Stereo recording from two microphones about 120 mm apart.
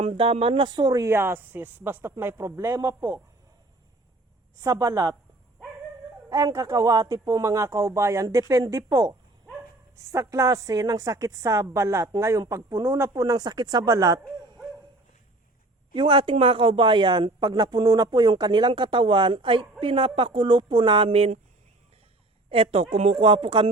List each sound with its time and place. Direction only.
0.0 s a woman's voice: 50° right (ahead or behind); by 3.2 s 20° right (ahead or behind)
4.6 s a woman's voice: 25° right (ahead or behind)
6.2 s a woman's voice: 25° right (ahead or behind)
15.9 s speech: 45° right (ahead or behind)
22.4 s speech: 50° right (ahead or behind)